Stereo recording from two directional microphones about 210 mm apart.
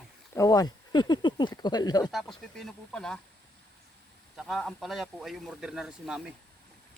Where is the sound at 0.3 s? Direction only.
15° left (ahead or behind).